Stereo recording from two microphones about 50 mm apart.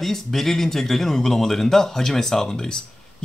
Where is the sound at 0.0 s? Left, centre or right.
Centre.